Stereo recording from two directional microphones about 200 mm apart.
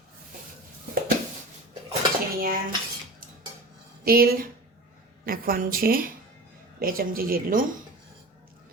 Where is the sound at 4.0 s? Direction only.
50° right (ahead or behind).